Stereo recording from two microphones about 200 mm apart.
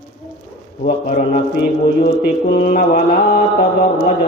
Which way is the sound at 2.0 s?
45° left (ahead or behind).